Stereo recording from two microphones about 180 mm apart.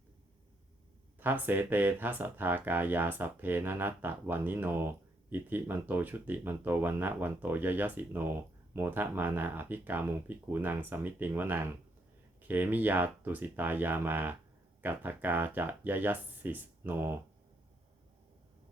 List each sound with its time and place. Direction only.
1.2 s speech: 10° right (ahead or behind)